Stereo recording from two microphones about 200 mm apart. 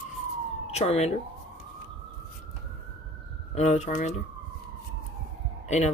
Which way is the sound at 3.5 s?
35° left (ahead or behind).